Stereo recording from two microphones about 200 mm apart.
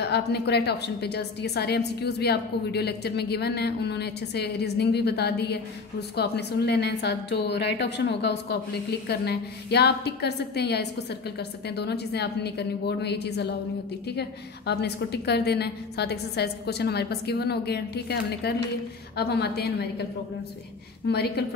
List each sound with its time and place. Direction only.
0.0 s a woman's voice: 55° left (ahead or behind)
14.7 s a woman's voice: 55° left (ahead or behind)
21.1 s a woman's voice: 55° left (ahead or behind)